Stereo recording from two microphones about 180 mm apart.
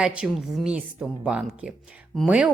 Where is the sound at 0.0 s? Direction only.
5° right (ahead or behind).